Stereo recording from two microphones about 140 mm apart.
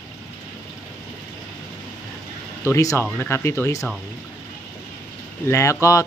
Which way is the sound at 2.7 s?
20° left (ahead or behind).